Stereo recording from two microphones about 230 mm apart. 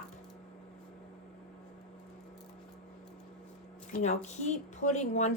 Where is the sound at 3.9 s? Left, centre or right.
Left.